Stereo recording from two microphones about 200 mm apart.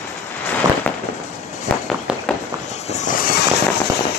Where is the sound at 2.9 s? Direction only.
40° left (ahead or behind).